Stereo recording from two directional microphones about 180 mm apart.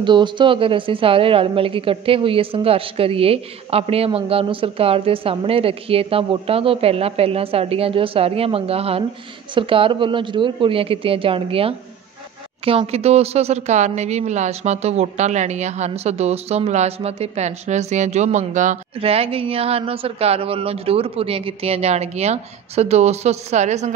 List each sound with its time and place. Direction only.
0.0 s speech: 25° right (ahead or behind)